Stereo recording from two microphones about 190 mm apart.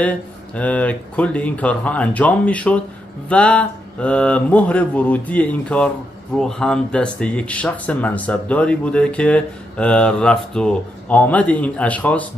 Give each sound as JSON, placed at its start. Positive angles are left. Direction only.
{"t": 0.6, "sound": "speech", "side_deg": 5}